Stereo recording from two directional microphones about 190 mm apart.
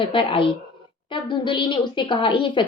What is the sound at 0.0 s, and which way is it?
Speech, 25° left (ahead or behind).